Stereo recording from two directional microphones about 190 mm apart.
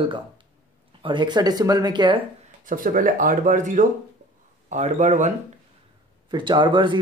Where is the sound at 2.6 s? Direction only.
45° right (ahead or behind).